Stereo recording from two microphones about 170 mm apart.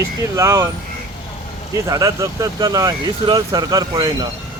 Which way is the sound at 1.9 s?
20° right (ahead or behind).